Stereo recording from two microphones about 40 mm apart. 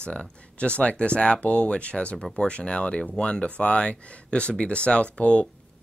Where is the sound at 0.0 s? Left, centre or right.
Left.